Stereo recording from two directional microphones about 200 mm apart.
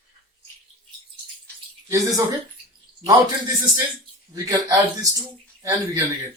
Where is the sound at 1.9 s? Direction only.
15° right (ahead or behind).